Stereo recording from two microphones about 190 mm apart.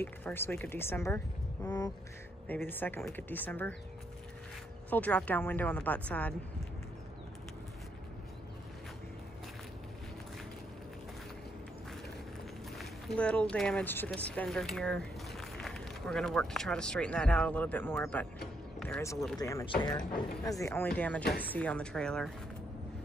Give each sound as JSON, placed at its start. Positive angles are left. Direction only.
{"t": 0.0, "sound": "speech", "side_deg": 10}
{"t": 4.8, "sound": "speech", "side_deg": 10}
{"t": 12.7, "sound": "speech", "side_deg": 5}
{"t": 21.2, "sound": "speech", "side_deg": 55}
{"t": 21.5, "sound": "speech", "side_deg": 5}